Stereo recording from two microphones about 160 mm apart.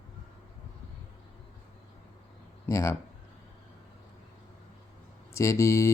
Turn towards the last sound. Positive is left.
turn(degrees=20)  # may be behind; listen again after turning